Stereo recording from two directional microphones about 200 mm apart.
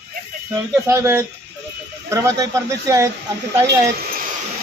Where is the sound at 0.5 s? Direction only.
10° right (ahead or behind).